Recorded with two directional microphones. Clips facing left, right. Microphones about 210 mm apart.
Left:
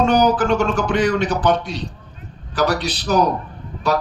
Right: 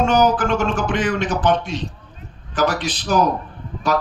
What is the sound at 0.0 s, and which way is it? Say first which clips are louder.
Speech: left 1 dB; 35° left (ahead or behind).